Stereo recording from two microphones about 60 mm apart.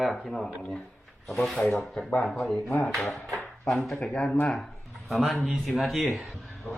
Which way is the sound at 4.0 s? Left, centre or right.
Centre.